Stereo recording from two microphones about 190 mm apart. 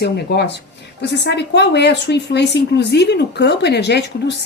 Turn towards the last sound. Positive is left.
turn(degrees=65)  # may be behind; listen again after turning